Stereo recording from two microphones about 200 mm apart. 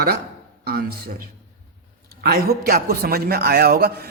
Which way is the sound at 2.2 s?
50° right (ahead or behind).